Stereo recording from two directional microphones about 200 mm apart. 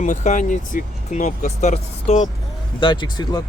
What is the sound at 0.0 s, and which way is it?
Speech, 40° left (ahead or behind).